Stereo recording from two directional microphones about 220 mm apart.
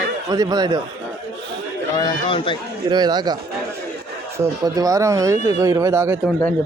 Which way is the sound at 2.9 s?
20° right (ahead or behind).